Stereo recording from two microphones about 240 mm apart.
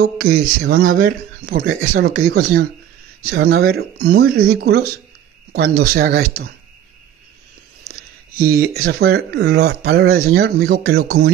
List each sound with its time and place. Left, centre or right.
0.4 s speech: right
7.9 s a sound: right
9.0 s speech: right